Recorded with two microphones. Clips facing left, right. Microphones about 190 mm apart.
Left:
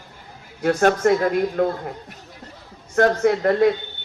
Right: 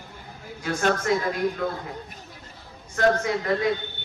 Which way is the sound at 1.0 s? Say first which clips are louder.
Left 6 dB; 55° left (ahead or behind).